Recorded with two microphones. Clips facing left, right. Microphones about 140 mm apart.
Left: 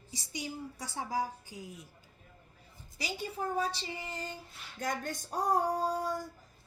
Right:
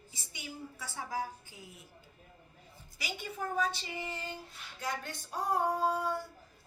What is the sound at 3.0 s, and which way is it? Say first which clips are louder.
A woman's voice: left 3 dB; 35° left (ahead or behind).